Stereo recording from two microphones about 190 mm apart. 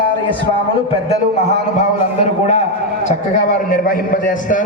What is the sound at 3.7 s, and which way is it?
Speech, 45° left (ahead or behind).